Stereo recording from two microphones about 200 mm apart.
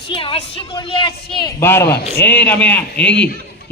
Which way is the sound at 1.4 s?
10° left (ahead or behind).